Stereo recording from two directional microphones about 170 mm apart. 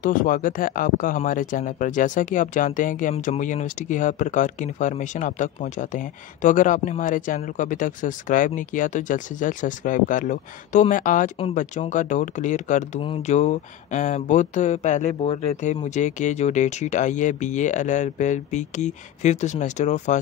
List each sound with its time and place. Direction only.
0.0 s speech: 55° left (ahead or behind)